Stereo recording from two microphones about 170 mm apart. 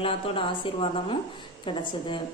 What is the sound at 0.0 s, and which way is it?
A woman's voice, 30° left (ahead or behind).